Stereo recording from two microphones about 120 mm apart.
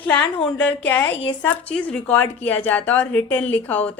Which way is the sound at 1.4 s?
10° left (ahead or behind).